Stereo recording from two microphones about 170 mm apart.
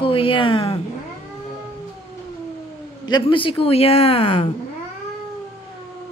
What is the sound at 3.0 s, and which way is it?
A woman's voice, 25° left (ahead or behind).